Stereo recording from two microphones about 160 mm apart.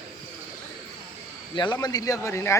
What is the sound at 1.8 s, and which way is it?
Speech, 25° left (ahead or behind).